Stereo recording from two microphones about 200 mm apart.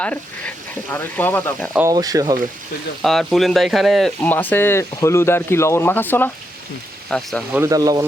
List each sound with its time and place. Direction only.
0.0 s speech: 5° left (ahead or behind)
1.7 s speech: 15° right (ahead or behind)
3.0 s speech: centre (ahead or behind)
7.5 s speech: 15° right (ahead or behind)